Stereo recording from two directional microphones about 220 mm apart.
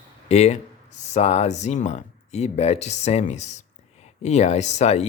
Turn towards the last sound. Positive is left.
turn(degrees=30)  # may be behind; listen again after turning